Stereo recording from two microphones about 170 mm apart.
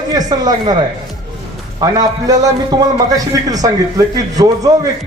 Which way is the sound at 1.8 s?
20° right (ahead or behind).